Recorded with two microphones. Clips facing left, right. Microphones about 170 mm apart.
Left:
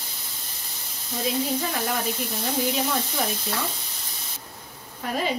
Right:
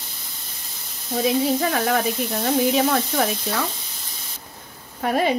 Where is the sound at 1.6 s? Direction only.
80° right.